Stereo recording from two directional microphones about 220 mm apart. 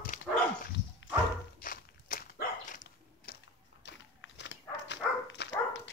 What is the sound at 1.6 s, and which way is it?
Dog, 40° left (ahead or behind).